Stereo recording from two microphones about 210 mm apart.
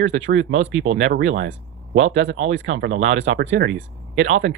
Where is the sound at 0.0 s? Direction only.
60° right (ahead or behind).